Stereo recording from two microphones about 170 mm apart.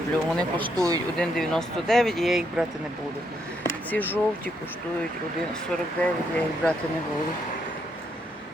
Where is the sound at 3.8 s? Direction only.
10° left (ahead or behind).